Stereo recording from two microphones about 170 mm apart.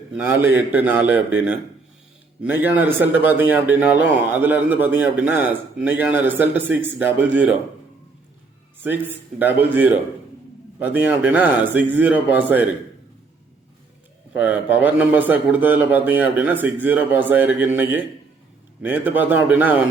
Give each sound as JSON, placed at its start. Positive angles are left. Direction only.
{"t": 0.2, "sound": "speech", "side_deg": -10}
{"t": 9.4, "sound": "speech", "side_deg": -10}
{"t": 14.3, "sound": "speech", "side_deg": -10}